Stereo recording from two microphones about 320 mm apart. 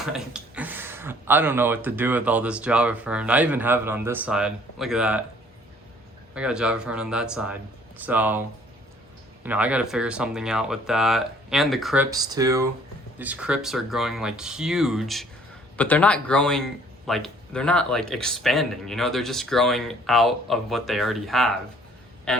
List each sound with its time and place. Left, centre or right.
0.0 s speech: centre
6.3 s speech: centre
12.1 s a man's voice: centre